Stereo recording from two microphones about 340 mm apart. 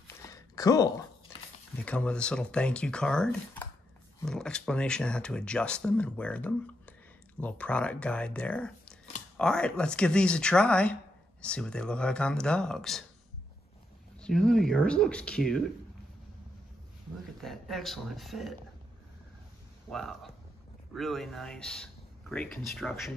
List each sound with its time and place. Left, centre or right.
0.6 s speech: centre
14.2 s speech: centre
17.4 s speech: centre
19.9 s speech: centre